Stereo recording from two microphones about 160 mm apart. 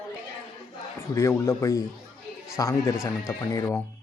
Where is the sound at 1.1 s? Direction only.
15° left (ahead or behind).